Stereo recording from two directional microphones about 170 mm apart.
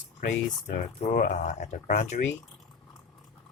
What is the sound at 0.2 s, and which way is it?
Speech, 50° left (ahead or behind).